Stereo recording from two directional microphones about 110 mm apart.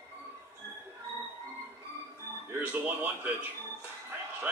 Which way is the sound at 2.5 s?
15° right (ahead or behind).